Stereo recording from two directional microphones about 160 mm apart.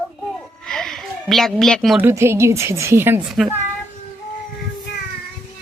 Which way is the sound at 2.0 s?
15° right (ahead or behind).